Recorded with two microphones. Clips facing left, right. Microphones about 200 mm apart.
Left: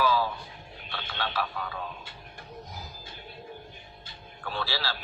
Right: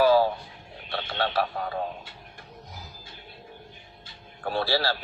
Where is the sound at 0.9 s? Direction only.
55° right (ahead or behind).